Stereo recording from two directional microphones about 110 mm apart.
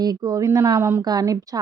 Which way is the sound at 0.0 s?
35° right (ahead or behind).